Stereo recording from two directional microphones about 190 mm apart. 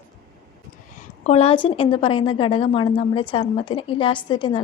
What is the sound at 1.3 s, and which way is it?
Speech, 30° left (ahead or behind).